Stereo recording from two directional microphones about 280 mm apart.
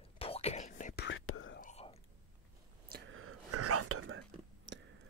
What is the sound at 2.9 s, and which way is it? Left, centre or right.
Whispering, right.